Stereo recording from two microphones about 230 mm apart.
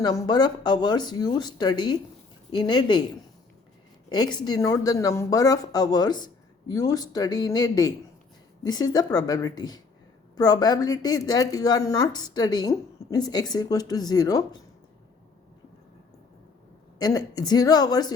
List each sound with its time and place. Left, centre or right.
0.0 s speech: centre
4.1 s speech: centre
17.0 s speech: centre